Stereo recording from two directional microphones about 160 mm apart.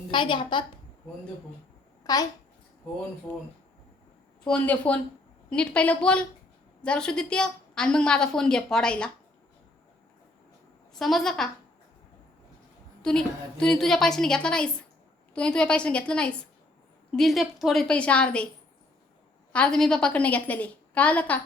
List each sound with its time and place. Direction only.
0.1 s a woman's voice: 30° left (ahead or behind)
2.0 s a child's voice: 25° left (ahead or behind)
4.4 s a woman's voice: 10° left (ahead or behind)
10.9 s a woman's voice: centre (ahead or behind)
13.0 s a woman's voice: 5° left (ahead or behind)
19.5 s a woman's voice: 5° left (ahead or behind)